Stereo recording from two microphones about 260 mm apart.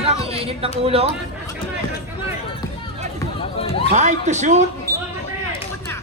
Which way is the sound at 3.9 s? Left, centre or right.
Right.